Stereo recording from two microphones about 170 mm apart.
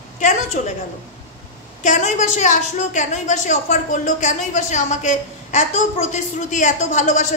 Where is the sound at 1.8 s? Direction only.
45° left (ahead or behind).